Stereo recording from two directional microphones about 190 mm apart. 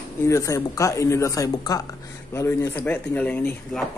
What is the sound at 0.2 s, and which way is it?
Speech, 15° left (ahead or behind).